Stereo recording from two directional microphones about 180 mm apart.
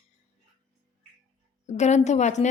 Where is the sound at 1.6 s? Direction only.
40° left (ahead or behind).